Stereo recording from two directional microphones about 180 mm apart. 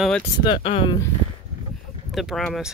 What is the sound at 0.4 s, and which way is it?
Speech, 30° left (ahead or behind).